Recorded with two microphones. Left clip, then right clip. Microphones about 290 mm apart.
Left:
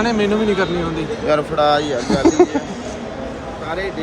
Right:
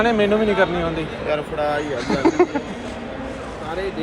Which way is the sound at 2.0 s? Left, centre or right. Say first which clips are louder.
Left 2 dB; centre.